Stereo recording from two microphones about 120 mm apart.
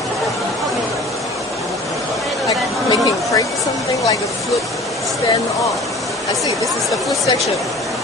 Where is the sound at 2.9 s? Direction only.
30° left (ahead or behind).